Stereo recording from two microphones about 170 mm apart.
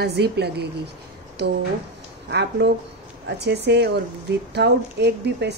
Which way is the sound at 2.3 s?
80° right.